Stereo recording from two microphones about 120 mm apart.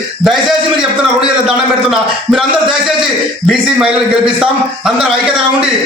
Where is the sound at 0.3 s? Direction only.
5° right (ahead or behind).